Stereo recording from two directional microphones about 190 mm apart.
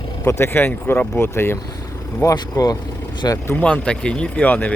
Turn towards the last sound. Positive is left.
turn(degrees=10)  # may be behind; listen again after turning